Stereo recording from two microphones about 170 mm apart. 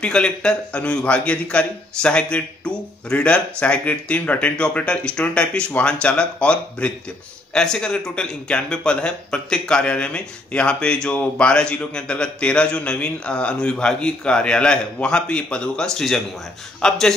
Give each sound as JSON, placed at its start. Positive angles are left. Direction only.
{"t": 0.0, "sound": "a man's voice", "side_deg": 5}